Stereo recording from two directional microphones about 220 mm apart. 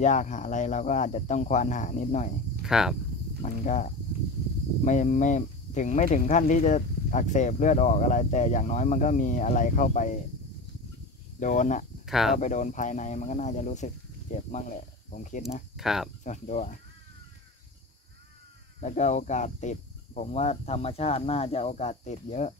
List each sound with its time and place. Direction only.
0.0 s speech: 35° left (ahead or behind)
2.6 s speech: centre (ahead or behind)
3.4 s speech: 35° left (ahead or behind)
11.3 s speech: 35° left (ahead or behind)
12.1 s speech: centre (ahead or behind)
12.4 s speech: 35° left (ahead or behind)
15.7 s speech: centre (ahead or behind)
16.3 s speech: 35° left (ahead or behind)
18.8 s speech: 30° left (ahead or behind)